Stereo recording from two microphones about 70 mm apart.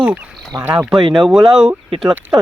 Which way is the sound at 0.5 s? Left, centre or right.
Right.